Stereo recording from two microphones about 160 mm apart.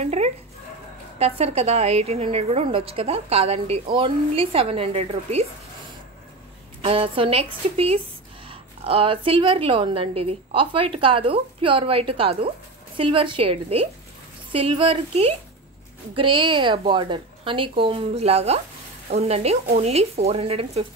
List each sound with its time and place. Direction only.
0.0 s a woman's voice: 45° right (ahead or behind)
6.8 s a woman's voice: 35° right (ahead or behind)